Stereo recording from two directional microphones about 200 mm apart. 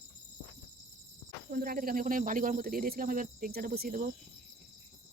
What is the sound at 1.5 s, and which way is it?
Speech, 45° right (ahead or behind).